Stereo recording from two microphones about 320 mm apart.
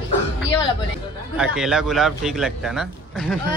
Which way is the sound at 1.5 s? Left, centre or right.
Centre.